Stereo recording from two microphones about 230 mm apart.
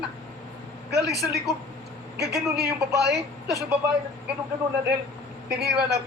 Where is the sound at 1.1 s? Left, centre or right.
Right.